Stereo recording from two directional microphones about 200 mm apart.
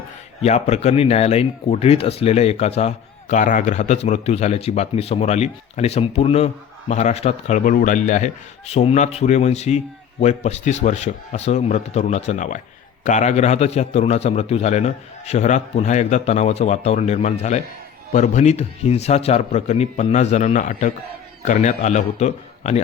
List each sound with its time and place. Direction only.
0.4 s speech: 35° left (ahead or behind)